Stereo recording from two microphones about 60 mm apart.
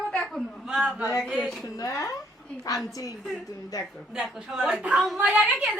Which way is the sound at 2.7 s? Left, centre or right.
Left.